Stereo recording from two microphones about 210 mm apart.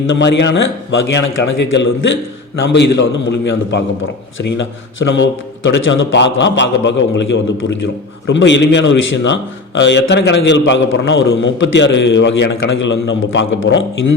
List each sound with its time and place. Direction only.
0.1 s a man's voice: 55° left (ahead or behind)